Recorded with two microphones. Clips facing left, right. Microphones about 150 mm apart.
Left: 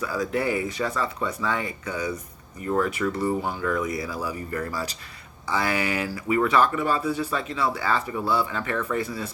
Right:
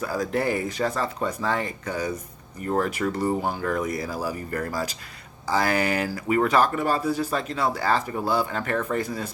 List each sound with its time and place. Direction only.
0.0 s speech: 40° right (ahead or behind)